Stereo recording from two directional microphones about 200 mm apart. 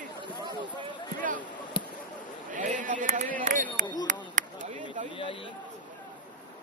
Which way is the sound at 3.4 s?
40° right (ahead or behind).